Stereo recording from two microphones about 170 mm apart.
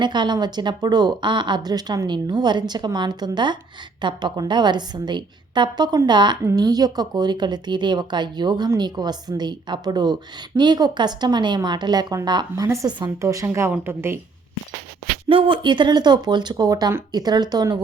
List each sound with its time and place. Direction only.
0.0 s a woman's voice: 25° right (ahead or behind)
15.3 s a woman's voice: 30° right (ahead or behind)